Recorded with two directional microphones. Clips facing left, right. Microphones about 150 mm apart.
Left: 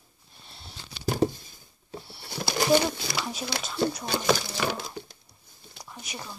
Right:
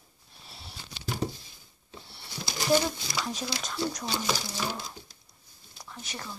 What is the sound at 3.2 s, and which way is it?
Speech, 5° left (ahead or behind).